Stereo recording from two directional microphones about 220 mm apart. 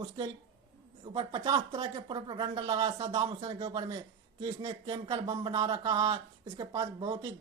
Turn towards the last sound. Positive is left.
turn(degrees=-15)  # may be behind; listen again after turning